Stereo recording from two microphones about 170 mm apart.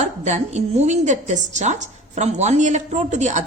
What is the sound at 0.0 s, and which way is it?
A woman's voice, 40° right (ahead or behind).